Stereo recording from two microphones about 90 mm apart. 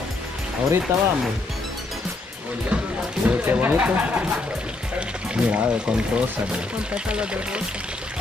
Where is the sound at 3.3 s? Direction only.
20° right (ahead or behind).